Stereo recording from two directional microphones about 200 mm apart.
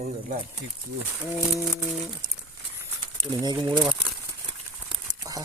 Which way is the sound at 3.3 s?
20° right (ahead or behind).